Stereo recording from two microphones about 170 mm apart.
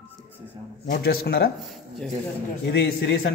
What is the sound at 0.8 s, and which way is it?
Speech, 65° left (ahead or behind).